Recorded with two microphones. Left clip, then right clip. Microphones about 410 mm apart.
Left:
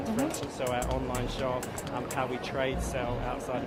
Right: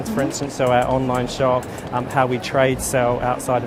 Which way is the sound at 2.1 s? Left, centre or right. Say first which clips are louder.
Right 15 dB; right.